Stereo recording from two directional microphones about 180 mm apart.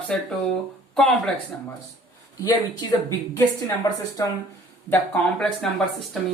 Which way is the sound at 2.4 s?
20° left (ahead or behind).